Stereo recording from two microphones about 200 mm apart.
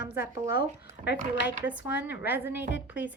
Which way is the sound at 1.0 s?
40° right (ahead or behind).